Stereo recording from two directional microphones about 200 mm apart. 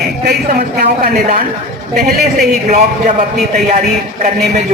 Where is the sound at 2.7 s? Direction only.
40° right (ahead or behind).